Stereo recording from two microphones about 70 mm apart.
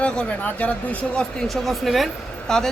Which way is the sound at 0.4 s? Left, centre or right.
Left.